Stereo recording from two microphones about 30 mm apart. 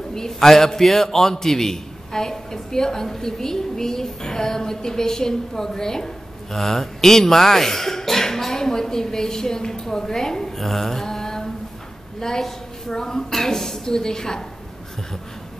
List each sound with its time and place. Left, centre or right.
0.1 s a man's voice: centre
6.5 s a man's voice: centre
10.6 s mantra: centre
12.2 s a woman's voice: centre